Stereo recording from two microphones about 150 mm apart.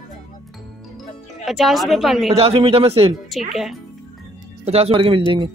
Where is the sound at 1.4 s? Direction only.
Centre (ahead or behind).